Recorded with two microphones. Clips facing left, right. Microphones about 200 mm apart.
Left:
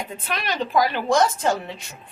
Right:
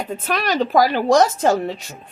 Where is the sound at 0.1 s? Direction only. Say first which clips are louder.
Right 7 dB; 45° right (ahead or behind).